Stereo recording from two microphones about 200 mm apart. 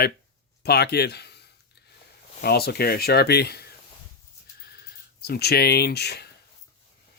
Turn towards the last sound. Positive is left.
turn(degrees=55)  # may be behind; listen again after turning